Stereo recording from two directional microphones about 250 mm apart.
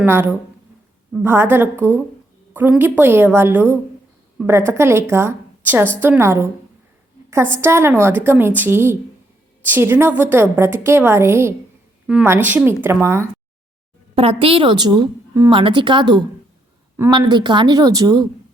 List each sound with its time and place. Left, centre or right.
0.0 s a woman's voice: centre
7.5 s a woman's voice: centre
14.2 s a woman's voice: right